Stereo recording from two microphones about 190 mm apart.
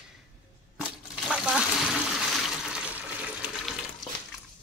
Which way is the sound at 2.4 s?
5° right (ahead or behind).